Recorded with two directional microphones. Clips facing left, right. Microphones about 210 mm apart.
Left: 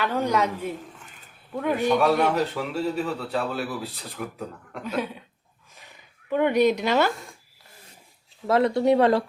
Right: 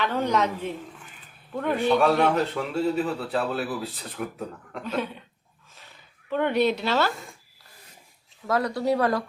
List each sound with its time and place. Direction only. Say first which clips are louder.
0.0 s a woman's voice: even; 10° left (ahead or behind)
4.8 s a woman's voice: left 1 dB; 10° left (ahead or behind)
6.3 s a woman's voice: left 3 dB; 10° left (ahead or behind)
8.4 s speech: left 4 dB; 25° left (ahead or behind)